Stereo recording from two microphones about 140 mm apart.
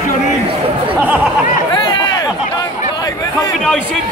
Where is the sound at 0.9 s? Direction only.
10° right (ahead or behind).